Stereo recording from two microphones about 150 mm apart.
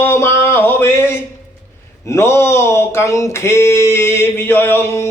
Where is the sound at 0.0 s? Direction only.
15° left (ahead or behind).